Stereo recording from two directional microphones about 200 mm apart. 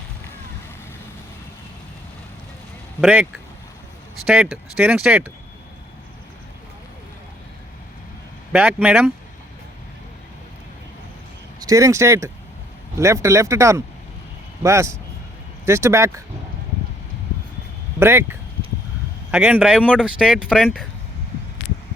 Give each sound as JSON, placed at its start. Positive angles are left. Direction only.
{"t": 3.0, "sound": "speech", "side_deg": -5}
{"t": 8.5, "sound": "speech", "side_deg": -5}
{"t": 11.6, "sound": "speech", "side_deg": -15}
{"t": 18.0, "sound": "speech", "side_deg": -10}